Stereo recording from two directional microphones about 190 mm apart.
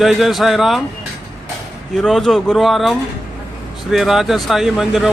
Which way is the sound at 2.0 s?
Centre (ahead or behind).